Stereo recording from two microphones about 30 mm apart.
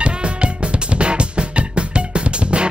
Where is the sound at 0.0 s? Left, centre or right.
Right.